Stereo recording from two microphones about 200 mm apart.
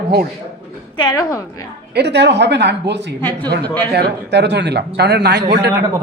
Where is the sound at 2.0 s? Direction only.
60° right (ahead or behind).